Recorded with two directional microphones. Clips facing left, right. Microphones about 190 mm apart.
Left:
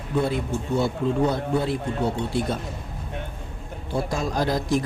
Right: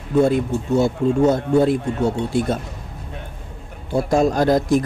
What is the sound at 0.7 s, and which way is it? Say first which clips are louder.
A man's voice: right 6 dB; 45° right (ahead or behind).